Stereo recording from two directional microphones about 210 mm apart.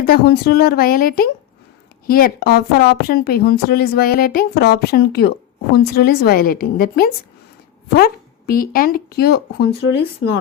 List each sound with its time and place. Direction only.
0.0 s a woman's voice: 45° left (ahead or behind)